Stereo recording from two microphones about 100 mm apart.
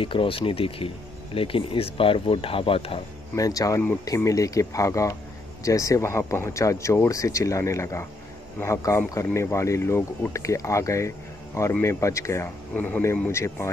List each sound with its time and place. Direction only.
0.0 s speech: 60° left (ahead or behind)
3.3 s speech: 35° left (ahead or behind)
12.7 s speech: 15° left (ahead or behind)
13.3 s speech: 25° left (ahead or behind)